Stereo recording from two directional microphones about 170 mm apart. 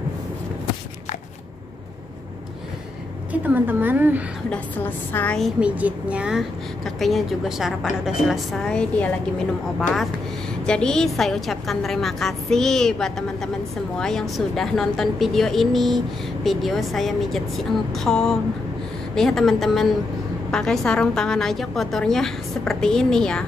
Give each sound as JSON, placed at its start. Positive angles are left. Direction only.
{"t": 3.4, "sound": "a woman's voice", "side_deg": -10}
{"t": 4.5, "sound": "a woman's voice", "side_deg": 10}
{"t": 5.6, "sound": "a woman's voice", "side_deg": -10}
{"t": 10.7, "sound": "a woman's voice", "side_deg": 5}